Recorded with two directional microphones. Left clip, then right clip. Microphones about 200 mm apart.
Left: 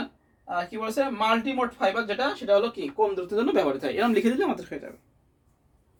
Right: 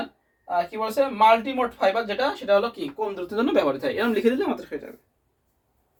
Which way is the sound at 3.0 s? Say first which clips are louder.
Left 2 dB; 10° left (ahead or behind).